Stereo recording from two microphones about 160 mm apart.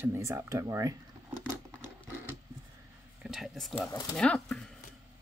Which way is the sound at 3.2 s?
Centre (ahead or behind).